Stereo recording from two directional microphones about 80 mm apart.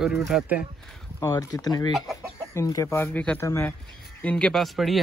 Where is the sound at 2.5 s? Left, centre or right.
Left.